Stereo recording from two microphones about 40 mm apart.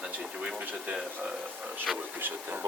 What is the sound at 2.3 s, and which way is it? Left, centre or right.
Speech, right.